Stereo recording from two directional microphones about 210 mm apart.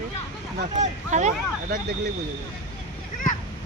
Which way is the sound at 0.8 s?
35° right (ahead or behind).